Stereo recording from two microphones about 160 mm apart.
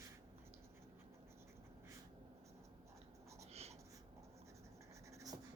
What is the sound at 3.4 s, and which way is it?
Writing, 40° right (ahead or behind).